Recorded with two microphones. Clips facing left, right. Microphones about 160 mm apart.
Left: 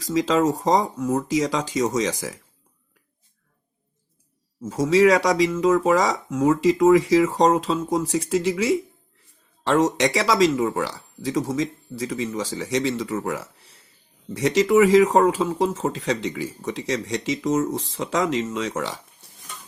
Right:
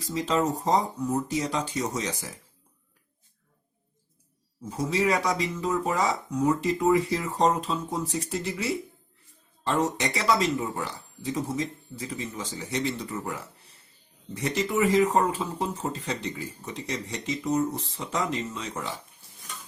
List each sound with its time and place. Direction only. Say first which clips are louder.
0.0 s speech: left 6 dB; 90° left
4.6 s speech: left 9 dB; 90° left